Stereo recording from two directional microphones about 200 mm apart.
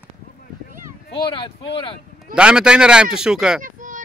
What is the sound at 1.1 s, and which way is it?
Speech, 25° left (ahead or behind).